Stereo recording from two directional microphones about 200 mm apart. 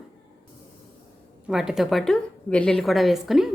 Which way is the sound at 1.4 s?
5° right (ahead or behind).